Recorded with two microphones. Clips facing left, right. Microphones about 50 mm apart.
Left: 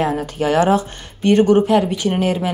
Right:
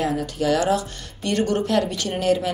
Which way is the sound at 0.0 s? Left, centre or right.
Left.